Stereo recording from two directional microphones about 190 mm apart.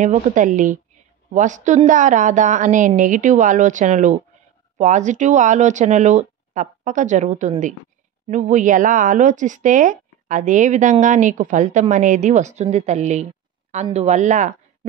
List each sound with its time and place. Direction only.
0.0 s speech: 40° right (ahead or behind)